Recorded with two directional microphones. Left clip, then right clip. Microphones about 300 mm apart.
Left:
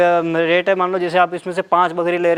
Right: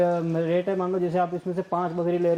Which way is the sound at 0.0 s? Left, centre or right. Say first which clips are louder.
Left 9 dB; centre.